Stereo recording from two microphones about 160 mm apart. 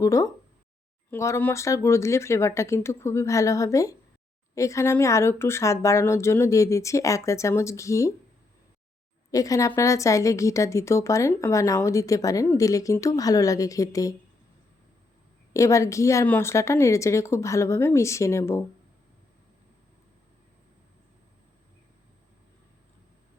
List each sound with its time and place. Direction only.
0.0 s a woman's voice: 20° left (ahead or behind)
9.3 s a woman's voice: 20° left (ahead or behind)
15.5 s a woman's voice: 20° left (ahead or behind)